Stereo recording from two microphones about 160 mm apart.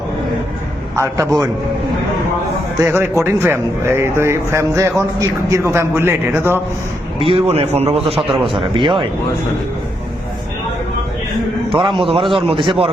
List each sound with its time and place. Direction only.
0.9 s a man's voice: 15° right (ahead or behind)
2.7 s a man's voice: 15° right (ahead or behind)
7.2 s a man's voice: 35° right (ahead or behind)
11.7 s a man's voice: 30° right (ahead or behind)